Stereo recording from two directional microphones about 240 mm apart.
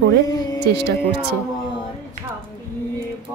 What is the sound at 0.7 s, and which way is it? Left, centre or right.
Speech, right.